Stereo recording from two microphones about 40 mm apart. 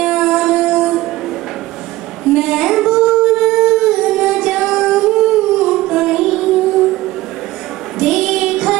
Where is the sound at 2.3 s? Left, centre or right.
Centre.